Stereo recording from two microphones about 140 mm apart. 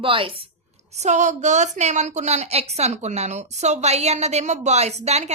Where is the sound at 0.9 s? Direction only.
55° right (ahead or behind).